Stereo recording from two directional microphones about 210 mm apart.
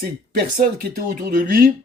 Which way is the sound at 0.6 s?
40° right (ahead or behind).